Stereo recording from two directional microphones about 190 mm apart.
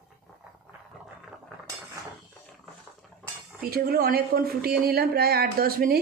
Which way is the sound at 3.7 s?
55° right (ahead or behind).